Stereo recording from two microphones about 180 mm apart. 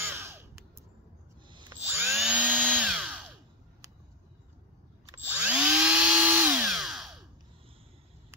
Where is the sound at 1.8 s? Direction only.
10° right (ahead or behind).